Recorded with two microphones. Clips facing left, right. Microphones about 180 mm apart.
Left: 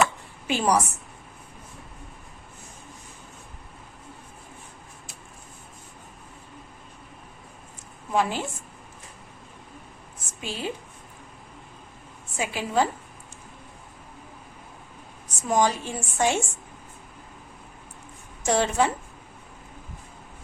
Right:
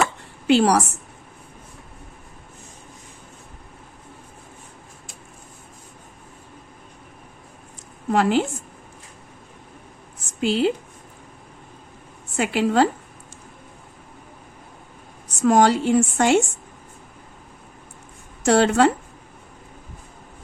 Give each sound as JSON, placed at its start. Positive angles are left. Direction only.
{"t": 0.4, "sound": "a woman's voice", "side_deg": -80}
{"t": 8.1, "sound": "a woman's voice", "side_deg": -75}
{"t": 10.2, "sound": "a sound", "side_deg": -75}
{"t": 12.4, "sound": "a woman's voice", "side_deg": -75}
{"t": 15.4, "sound": "a woman's voice", "side_deg": -80}
{"t": 18.4, "sound": "a woman's voice", "side_deg": -75}